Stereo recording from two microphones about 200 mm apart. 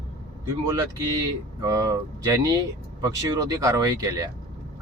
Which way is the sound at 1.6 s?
15° right (ahead or behind).